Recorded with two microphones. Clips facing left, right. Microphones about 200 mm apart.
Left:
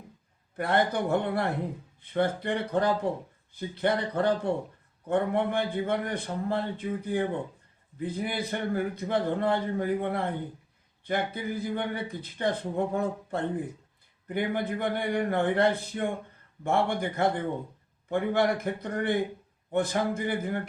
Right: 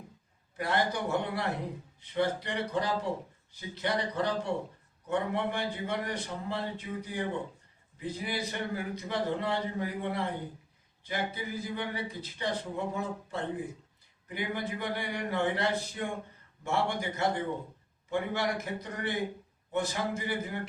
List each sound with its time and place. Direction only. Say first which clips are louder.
0.5 s a man's voice: left 4 dB; 55° left (ahead or behind)